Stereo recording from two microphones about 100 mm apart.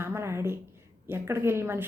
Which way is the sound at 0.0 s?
25° right (ahead or behind).